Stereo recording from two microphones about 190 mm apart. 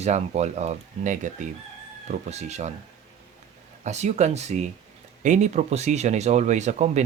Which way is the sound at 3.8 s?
40° right (ahead or behind).